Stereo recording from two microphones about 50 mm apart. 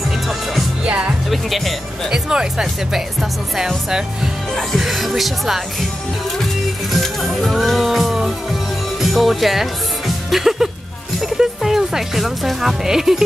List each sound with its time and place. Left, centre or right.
0.8 s music: right
1.3 s speech: centre
2.0 s speech: centre
6.9 s music: centre
11.1 s speech: centre